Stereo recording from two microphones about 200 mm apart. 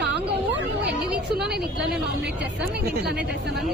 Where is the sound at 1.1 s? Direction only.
5° right (ahead or behind).